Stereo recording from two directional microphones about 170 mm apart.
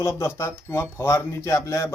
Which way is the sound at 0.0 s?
15° left (ahead or behind).